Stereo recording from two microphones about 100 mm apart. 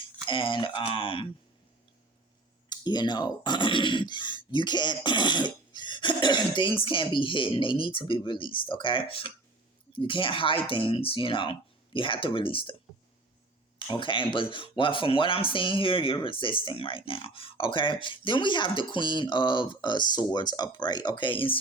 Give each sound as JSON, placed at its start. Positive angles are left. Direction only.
{"t": 0.3, "sound": "speech", "side_deg": 55}
{"t": 2.6, "sound": "speech", "side_deg": 45}
{"t": 13.7, "sound": "speech", "side_deg": 55}